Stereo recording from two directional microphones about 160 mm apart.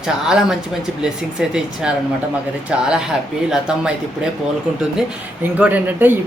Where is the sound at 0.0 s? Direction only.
5° right (ahead or behind).